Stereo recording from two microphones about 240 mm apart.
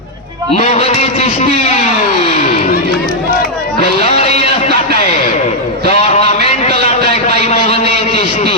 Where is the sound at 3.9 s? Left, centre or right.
Left.